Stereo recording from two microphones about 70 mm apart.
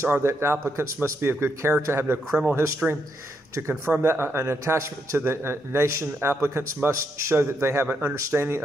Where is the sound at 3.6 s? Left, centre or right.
Right.